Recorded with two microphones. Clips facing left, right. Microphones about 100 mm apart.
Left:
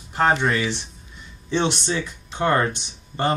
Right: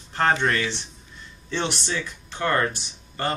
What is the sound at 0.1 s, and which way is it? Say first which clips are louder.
Speech: left 2 dB; 10° left (ahead or behind).